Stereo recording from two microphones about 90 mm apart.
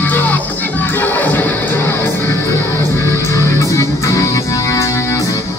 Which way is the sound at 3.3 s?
35° left (ahead or behind).